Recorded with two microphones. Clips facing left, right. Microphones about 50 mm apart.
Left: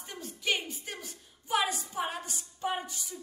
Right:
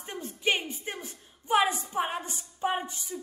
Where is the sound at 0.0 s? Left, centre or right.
Right.